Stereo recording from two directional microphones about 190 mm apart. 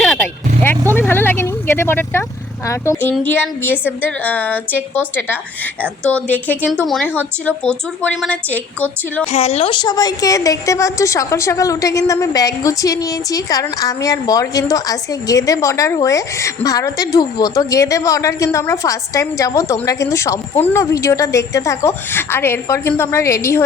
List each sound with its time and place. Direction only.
0.0 s vehicle: 10° left (ahead or behind)
2.6 s a woman's voice: 15° left (ahead or behind)
9.2 s a woman's voice: 35° left (ahead or behind); by 23.6 s 15° left (ahead or behind)